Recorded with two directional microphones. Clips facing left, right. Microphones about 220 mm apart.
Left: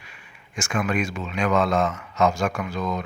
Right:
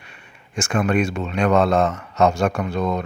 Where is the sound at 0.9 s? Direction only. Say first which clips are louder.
Right 5 dB; 60° right (ahead or behind).